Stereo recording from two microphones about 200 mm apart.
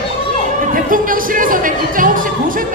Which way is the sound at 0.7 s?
45° right (ahead or behind).